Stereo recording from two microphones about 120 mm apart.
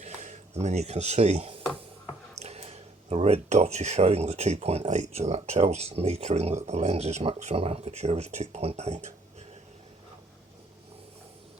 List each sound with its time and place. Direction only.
0.0 s speech: 75° right (ahead or behind)